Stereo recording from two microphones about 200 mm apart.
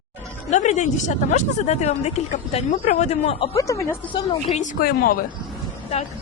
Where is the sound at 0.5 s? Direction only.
35° left (ahead or behind).